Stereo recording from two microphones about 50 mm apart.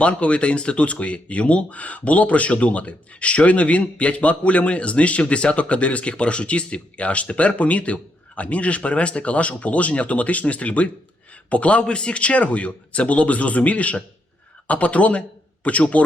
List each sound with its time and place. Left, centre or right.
0.0 s speech: left